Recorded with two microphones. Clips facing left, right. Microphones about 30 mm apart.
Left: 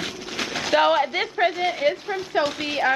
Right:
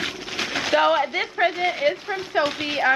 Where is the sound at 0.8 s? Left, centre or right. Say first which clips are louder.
Left 1 dB; centre.